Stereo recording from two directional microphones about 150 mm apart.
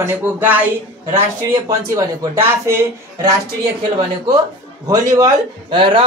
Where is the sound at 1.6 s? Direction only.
20° right (ahead or behind).